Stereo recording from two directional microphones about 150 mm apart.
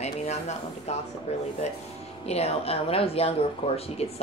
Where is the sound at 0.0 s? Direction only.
45° left (ahead or behind).